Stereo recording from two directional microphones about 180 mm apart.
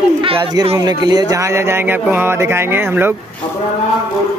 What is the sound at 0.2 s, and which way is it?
Speech, 30° right (ahead or behind).